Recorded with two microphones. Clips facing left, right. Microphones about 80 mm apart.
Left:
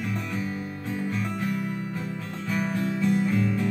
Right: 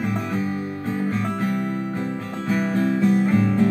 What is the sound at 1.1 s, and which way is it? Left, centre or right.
Music, right.